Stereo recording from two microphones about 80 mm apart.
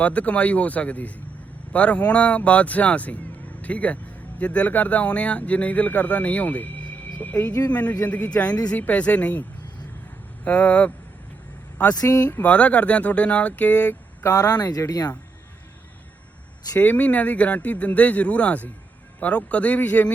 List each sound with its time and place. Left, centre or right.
0.0 s speech: centre
10.4 s speech: centre
11.9 s speech: left
12.4 s speech: centre
14.3 s speech: left
16.7 s speech: centre